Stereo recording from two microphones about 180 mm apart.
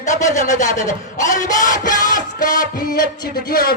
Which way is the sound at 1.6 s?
45° left (ahead or behind).